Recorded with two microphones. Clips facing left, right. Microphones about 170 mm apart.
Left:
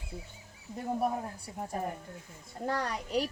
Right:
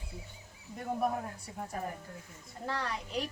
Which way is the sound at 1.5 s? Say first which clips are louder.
Left 3 dB; 30° left (ahead or behind).